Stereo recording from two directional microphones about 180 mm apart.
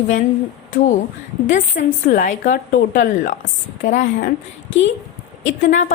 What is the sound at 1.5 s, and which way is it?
A woman's voice, 45° left (ahead or behind).